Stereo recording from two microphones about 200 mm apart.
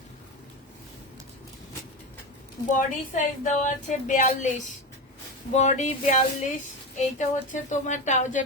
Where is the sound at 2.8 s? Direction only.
40° left (ahead or behind).